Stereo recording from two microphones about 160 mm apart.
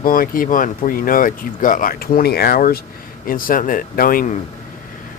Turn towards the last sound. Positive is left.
turn(degrees=60)  # may be behind; listen again after turning